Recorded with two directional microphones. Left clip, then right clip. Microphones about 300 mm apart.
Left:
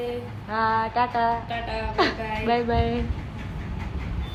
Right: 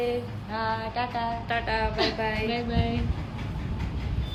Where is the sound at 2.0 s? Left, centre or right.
Centre.